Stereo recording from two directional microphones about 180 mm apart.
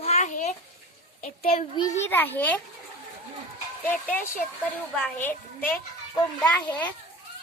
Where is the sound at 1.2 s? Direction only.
40° left (ahead or behind).